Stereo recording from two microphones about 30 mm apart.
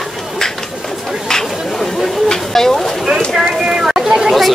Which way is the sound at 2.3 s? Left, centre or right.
Centre.